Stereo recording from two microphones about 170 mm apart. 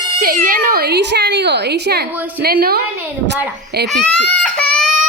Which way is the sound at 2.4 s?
65° right (ahead or behind).